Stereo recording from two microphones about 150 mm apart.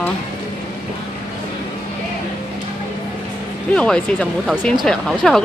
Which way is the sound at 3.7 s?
5° left (ahead or behind).